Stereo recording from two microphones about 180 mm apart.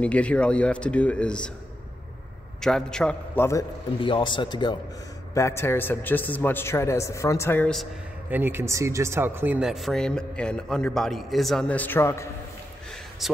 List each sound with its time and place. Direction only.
0.0 s speech: 5° left (ahead or behind)
2.6 s speech: 5° left (ahead or behind)
4.0 s speech: 25° left (ahead or behind)
5.3 s a man's voice: 15° left (ahead or behind)
8.3 s speech: 10° right (ahead or behind); by 12.3 s 15° left (ahead or behind)
13.2 s speech: centre (ahead or behind)